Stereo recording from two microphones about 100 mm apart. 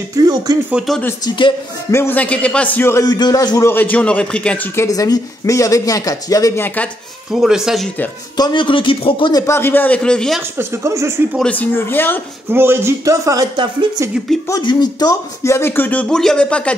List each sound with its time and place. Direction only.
1.9 s speech: 25° left (ahead or behind)
2.1 s a man's voice: 10° left (ahead or behind)
3.0 s speech: 45° left (ahead or behind)
3.6 s a man's voice: 20° left (ahead or behind)
4.7 s speech: 35° left (ahead or behind)
6.5 s speech: 20° left (ahead or behind)
7.3 s speech: 5° right (ahead or behind)
8.4 s speech: 50° left (ahead or behind)
9.5 s a man's voice: 20° left (ahead or behind)
10.6 s speech: 30° right (ahead or behind)
11.4 s speech: 15° left (ahead or behind)
12.4 s speech: 25° right (ahead or behind)
14.6 s speech: 45° left (ahead or behind); by 16.7 s 10° left (ahead or behind)